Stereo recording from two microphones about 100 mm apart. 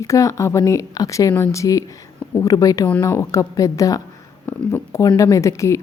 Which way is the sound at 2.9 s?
25° left (ahead or behind).